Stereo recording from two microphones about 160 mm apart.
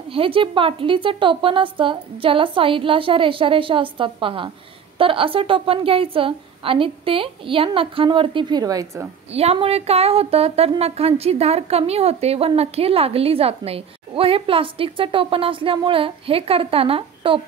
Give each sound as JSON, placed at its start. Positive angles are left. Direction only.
{"t": 0.1, "sound": "a woman's voice", "side_deg": -35}
{"t": 9.3, "sound": "a woman's voice", "side_deg": -40}